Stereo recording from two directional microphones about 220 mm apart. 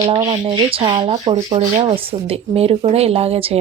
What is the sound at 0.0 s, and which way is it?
A woman's voice, 25° right (ahead or behind).